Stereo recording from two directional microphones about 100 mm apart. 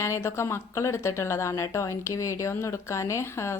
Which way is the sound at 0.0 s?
30° left (ahead or behind).